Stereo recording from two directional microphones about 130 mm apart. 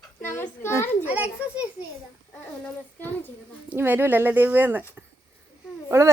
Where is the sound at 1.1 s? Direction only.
10° right (ahead or behind).